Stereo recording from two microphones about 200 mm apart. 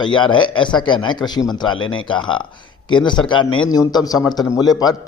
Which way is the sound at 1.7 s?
90° left.